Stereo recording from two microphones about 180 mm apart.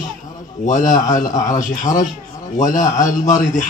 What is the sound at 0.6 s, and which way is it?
Speech, 45° left (ahead or behind).